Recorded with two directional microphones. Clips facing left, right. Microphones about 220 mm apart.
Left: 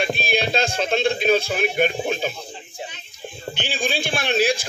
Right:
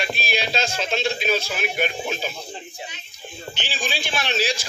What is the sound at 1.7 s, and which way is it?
Speech, 50° left (ahead or behind).